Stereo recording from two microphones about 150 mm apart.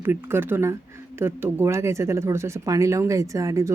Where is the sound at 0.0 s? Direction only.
15° right (ahead or behind).